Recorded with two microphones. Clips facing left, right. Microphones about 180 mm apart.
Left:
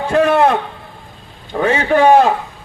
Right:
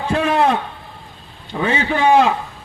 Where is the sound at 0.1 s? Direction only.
60° left (ahead or behind).